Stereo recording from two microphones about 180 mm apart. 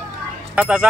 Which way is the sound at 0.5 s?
5° right (ahead or behind).